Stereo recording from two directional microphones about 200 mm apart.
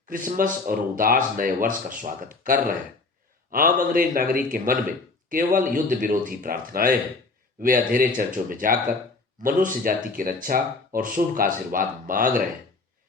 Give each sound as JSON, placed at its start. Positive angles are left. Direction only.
{"t": 0.1, "sound": "speech", "side_deg": -45}